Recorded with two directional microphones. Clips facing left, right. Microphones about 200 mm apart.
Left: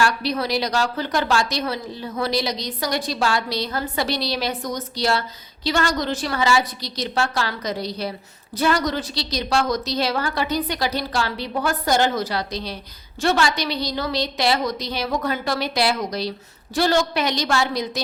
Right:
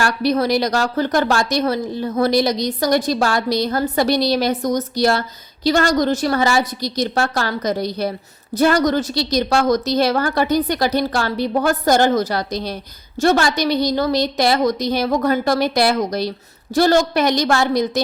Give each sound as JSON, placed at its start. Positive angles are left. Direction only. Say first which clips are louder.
{"t": 0.0, "sound": "a woman's voice", "louder": "right 4 dB", "side_deg": -45}